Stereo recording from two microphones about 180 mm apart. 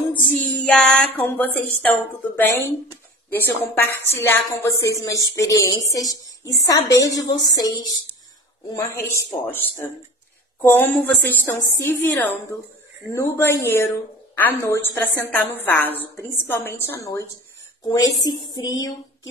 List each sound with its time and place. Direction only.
0.1 s a woman's voice: 10° left (ahead or behind)
10.6 s a woman's voice: 10° left (ahead or behind)